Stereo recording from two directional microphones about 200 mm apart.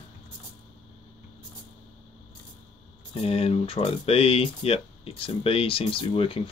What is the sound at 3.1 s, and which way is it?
Speech, 30° left (ahead or behind).